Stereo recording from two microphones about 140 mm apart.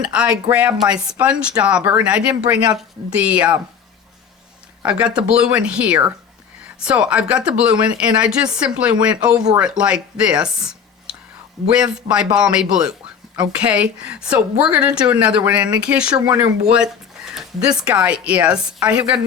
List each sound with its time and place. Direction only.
0.0 s speech: 5° right (ahead or behind)
4.8 s speech: 10° right (ahead or behind)
16.2 s speech: 30° right (ahead or behind)
17.3 s speech: 5° right (ahead or behind)